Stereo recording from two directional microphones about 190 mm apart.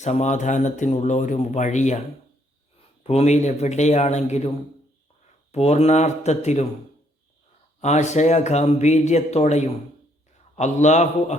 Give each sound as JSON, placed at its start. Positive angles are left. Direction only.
{"t": 0.0, "sound": "speech", "side_deg": 35}
{"t": 3.0, "sound": "speech", "side_deg": 35}
{"t": 7.8, "sound": "speech", "side_deg": 35}